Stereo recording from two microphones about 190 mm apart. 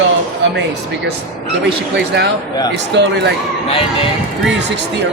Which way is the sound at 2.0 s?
65° right (ahead or behind).